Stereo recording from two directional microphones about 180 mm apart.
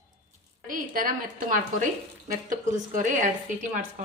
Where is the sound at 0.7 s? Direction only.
50° right (ahead or behind).